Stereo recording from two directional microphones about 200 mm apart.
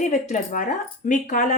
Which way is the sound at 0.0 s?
35° left (ahead or behind).